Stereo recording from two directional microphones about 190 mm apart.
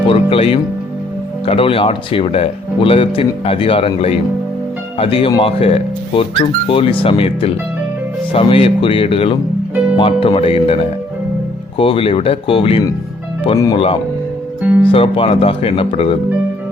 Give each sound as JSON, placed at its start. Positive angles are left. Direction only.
{"t": 0.1, "sound": "speech", "side_deg": 30}
{"t": 11.8, "sound": "speech", "side_deg": 30}